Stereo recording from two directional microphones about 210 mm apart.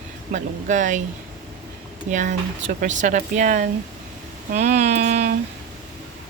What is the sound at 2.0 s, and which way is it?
Speech, 35° right (ahead or behind).